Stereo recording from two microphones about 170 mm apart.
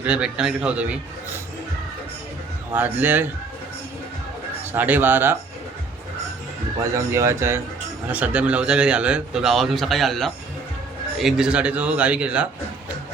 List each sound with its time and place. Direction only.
0.0 s a man's voice: 5° right (ahead or behind)
2.7 s a man's voice: 10° right (ahead or behind)
4.7 s a man's voice: 10° right (ahead or behind)
6.9 s a man's voice: 15° right (ahead or behind)